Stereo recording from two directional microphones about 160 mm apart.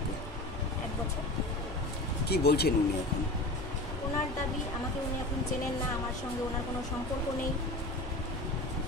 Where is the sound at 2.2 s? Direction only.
85° left.